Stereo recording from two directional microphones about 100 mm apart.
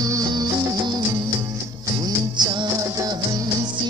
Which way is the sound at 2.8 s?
35° right (ahead or behind).